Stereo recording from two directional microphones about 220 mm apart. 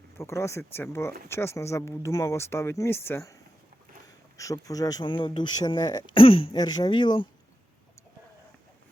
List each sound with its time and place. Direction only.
0.2 s speech: 15° left (ahead or behind)